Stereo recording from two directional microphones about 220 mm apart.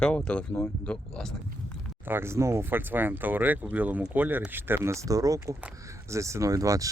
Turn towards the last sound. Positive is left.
turn(degrees=-15)  # may be behind; listen again after turning